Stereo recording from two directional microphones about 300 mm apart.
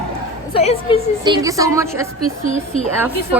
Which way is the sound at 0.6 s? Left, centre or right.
Centre.